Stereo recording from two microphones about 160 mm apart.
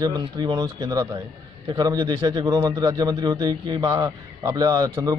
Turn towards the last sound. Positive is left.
turn(degrees=-20)  # may be behind; listen again after turning